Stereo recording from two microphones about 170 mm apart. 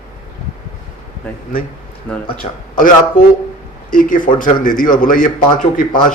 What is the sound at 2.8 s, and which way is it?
A man's voice, 55° left (ahead or behind).